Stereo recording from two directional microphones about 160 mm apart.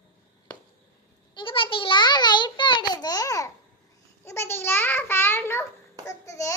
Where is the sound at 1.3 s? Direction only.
35° left (ahead or behind).